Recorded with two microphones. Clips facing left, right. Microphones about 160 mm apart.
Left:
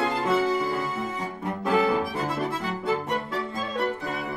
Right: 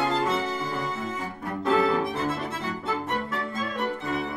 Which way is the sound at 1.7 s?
15° left (ahead or behind).